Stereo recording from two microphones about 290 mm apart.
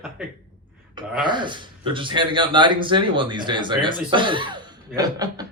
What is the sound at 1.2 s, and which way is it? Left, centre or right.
Speech, centre.